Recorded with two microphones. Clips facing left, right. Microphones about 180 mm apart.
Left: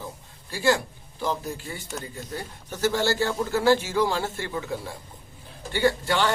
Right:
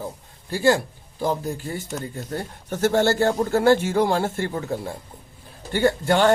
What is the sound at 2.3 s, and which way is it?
A man's voice, 55° right (ahead or behind).